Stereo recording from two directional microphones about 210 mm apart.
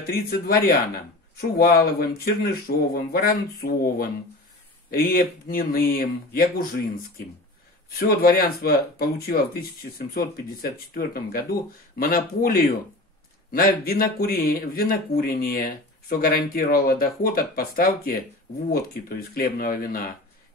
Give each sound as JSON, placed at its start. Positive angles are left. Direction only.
{"t": 0.0, "sound": "speech", "side_deg": 45}
{"t": 7.9, "sound": "speech", "side_deg": 45}